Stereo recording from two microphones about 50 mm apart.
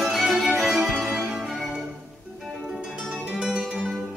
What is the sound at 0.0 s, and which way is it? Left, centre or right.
Music, centre.